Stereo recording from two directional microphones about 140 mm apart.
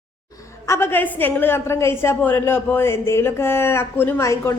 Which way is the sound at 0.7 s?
15° left (ahead or behind).